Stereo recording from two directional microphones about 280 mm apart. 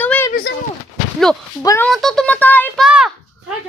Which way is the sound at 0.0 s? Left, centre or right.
Centre.